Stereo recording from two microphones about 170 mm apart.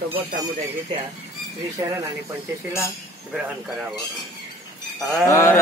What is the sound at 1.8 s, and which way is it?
Speech, 20° right (ahead or behind).